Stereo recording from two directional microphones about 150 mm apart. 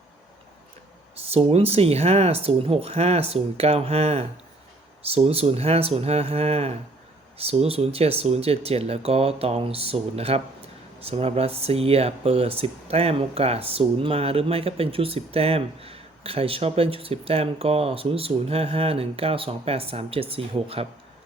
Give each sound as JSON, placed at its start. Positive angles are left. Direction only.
{"t": 1.3, "sound": "speech", "side_deg": -40}